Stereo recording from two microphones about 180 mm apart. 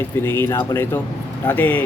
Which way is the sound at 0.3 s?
15° left (ahead or behind).